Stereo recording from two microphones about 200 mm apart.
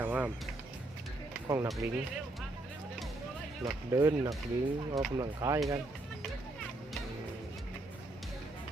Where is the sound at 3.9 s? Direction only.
15° right (ahead or behind).